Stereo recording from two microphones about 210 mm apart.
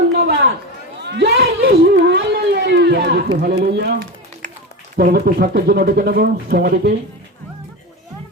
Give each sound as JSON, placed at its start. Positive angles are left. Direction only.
{"t": 0.2, "sound": "chatter", "side_deg": -50}
{"t": 1.0, "sound": "wail", "side_deg": -55}
{"t": 3.4, "sound": "speech", "side_deg": -45}